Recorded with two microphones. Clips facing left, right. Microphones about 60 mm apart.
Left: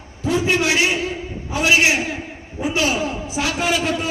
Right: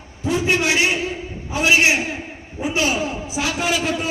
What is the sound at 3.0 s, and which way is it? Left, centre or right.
Speech, centre.